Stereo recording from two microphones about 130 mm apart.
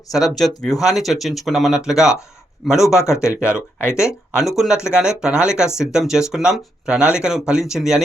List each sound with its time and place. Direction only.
0.1 s speech: centre (ahead or behind)
3.4 s speech: 20° left (ahead or behind)
4.4 s speech: centre (ahead or behind)